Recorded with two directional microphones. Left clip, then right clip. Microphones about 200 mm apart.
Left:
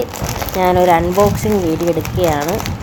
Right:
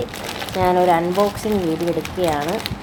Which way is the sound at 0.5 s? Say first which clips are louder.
Left 4 dB; 15° left (ahead or behind).